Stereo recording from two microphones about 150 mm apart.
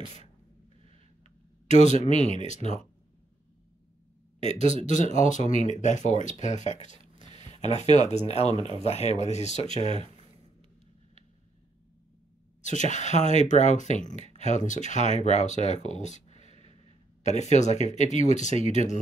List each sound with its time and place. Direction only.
2.0 s speech: 50° left (ahead or behind)
4.4 s a man's voice: 50° left (ahead or behind)
12.6 s speech: 55° left (ahead or behind)
15.9 s a sound: 50° left (ahead or behind)
17.2 s speech: 50° left (ahead or behind)